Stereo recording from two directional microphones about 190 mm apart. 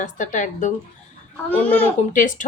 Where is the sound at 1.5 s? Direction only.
10° left (ahead or behind).